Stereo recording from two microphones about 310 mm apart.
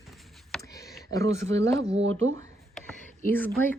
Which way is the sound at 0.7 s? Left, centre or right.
Centre.